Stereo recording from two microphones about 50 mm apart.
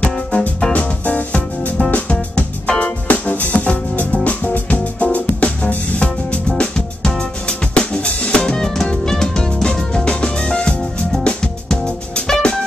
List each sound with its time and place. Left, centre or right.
0.0 s music: left
6.6 s drum kit: centre